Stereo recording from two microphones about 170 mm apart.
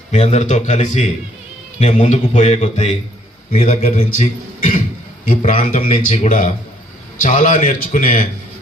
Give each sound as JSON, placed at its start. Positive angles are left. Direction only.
{"t": 0.1, "sound": "a man's voice", "side_deg": 40}
{"t": 5.2, "sound": "a man's voice", "side_deg": 55}